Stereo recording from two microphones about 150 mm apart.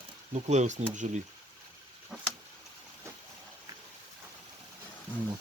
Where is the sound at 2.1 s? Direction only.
Centre (ahead or behind).